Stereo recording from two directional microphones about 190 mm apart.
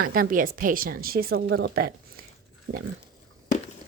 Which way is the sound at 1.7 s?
55° right (ahead or behind).